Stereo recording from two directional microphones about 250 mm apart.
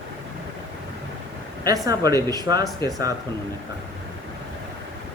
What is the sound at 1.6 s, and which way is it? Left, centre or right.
A man's voice, centre.